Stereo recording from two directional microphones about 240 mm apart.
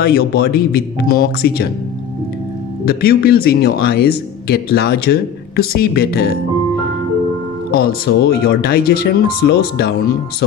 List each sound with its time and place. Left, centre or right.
0.0 s speech: left
2.8 s speech: left
7.7 s speech: left